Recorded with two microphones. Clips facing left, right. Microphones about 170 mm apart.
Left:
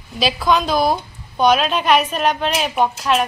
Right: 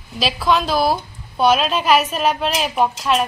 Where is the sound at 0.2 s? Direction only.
Centre (ahead or behind).